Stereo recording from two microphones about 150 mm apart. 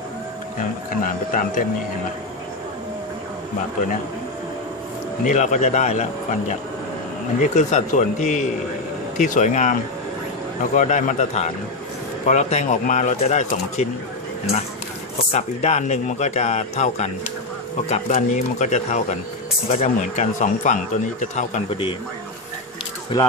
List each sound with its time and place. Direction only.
1.0 s speech: 65° left (ahead or behind)
5.2 s speech: 55° left (ahead or behind)
7.5 s speech: 50° left (ahead or behind)
15.3 s speech: 45° left (ahead or behind)